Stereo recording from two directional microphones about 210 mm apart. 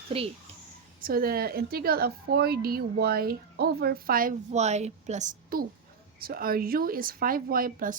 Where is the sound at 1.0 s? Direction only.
45° right (ahead or behind).